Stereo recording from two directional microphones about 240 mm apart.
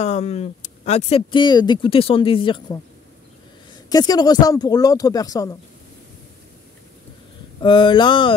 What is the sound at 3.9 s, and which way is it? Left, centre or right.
Speech, centre.